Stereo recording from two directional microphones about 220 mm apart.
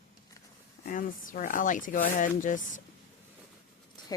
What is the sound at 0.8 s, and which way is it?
Speech, 35° left (ahead or behind).